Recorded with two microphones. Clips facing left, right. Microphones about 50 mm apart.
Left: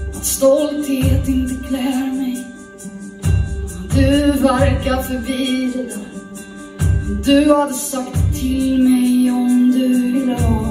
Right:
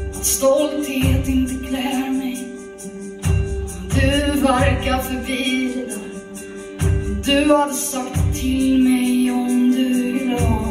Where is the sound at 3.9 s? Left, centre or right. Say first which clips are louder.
Left 5 dB; right.